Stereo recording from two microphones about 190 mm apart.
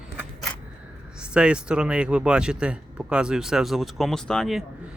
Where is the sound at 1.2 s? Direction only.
5° right (ahead or behind).